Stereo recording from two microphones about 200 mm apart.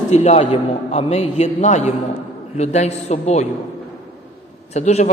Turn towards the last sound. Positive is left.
turn(degrees=35)  # may be behind; listen again after turning